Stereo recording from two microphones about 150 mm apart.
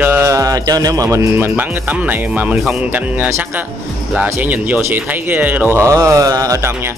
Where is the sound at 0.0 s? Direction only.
15° right (ahead or behind).